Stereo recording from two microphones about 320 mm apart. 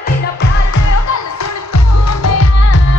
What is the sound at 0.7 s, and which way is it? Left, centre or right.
Music, left.